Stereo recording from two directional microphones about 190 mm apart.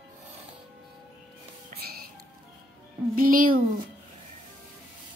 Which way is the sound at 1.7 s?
55° right (ahead or behind).